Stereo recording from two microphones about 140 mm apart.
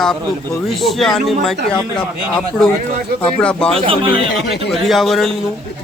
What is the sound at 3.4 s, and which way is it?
Speech, 5° left (ahead or behind).